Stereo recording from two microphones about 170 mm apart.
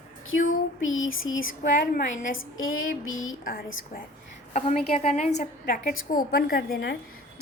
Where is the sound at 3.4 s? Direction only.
55° left (ahead or behind).